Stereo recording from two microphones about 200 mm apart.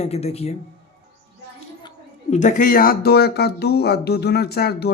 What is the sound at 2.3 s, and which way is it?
Speech, 40° left (ahead or behind).